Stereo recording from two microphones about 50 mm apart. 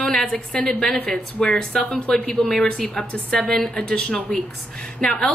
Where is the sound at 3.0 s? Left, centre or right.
Left.